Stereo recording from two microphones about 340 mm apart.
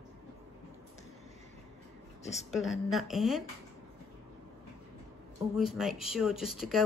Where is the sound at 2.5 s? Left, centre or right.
Centre.